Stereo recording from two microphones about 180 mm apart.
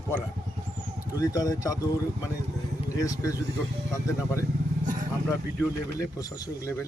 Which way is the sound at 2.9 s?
20° left (ahead or behind).